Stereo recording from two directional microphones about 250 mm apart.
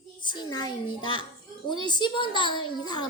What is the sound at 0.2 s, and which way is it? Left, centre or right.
A child's voice, centre.